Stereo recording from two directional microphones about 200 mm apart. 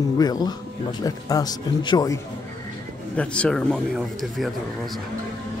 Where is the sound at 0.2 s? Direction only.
20° left (ahead or behind).